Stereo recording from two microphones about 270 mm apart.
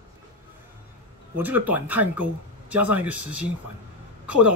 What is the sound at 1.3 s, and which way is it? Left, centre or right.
A man's voice, centre.